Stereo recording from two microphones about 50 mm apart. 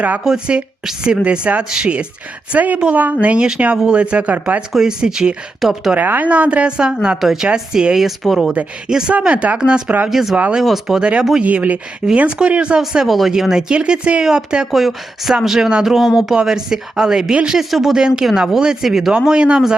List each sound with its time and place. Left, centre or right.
0.3 s speech: centre; by 4.6 s right
4.7 s speech: centre
6.2 s speech: right
7.2 s speech: centre
8.9 s speech: centre
9.1 s speech: right
10.1 s speech: centre
11.4 s speech: right
13.1 s speech: centre
14.7 s speech: centre
17.7 s speech: centre
17.9 s speech: centre
19.1 s speech: centre